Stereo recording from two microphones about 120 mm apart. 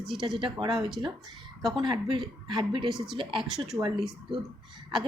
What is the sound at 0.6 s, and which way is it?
A woman's voice, 40° right (ahead or behind).